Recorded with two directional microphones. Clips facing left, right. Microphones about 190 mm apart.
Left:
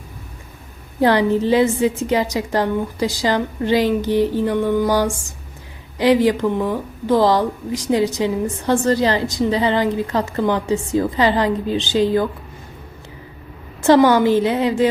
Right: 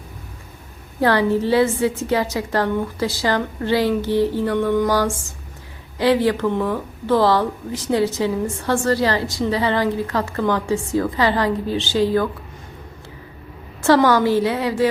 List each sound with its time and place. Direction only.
1.0 s speech: 15° left (ahead or behind)
13.8 s a woman's voice: 20° left (ahead or behind)